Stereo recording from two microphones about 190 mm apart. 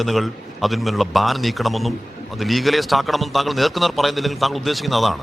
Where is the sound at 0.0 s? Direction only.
Centre (ahead or behind).